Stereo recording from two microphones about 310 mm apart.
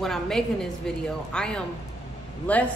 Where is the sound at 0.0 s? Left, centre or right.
Centre.